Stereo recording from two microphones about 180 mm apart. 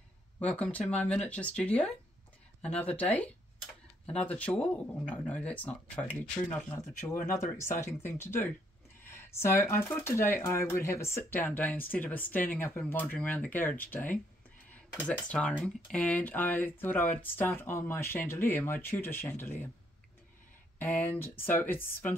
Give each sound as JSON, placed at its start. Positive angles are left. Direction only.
{"t": 0.4, "sound": "speech", "side_deg": 5}
{"t": 7.0, "sound": "speech", "side_deg": 20}
{"t": 21.2, "sound": "speech", "side_deg": 10}